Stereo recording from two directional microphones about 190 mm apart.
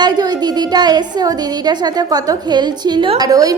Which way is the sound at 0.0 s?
20° right (ahead or behind).